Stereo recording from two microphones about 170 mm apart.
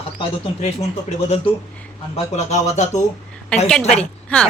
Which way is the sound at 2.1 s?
45° left (ahead or behind).